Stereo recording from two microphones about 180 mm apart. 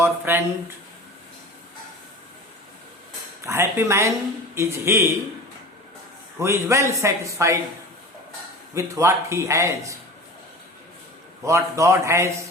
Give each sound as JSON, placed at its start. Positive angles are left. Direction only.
{"t": 0.0, "sound": "a man's voice", "side_deg": -10}
{"t": 3.4, "sound": "a man's voice", "side_deg": -15}
{"t": 6.4, "sound": "a man's voice", "side_deg": -15}
{"t": 8.7, "sound": "a man's voice", "side_deg": -15}
{"t": 11.4, "sound": "a man's voice", "side_deg": -15}